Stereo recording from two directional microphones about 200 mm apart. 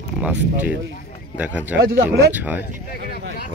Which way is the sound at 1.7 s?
55° right (ahead or behind).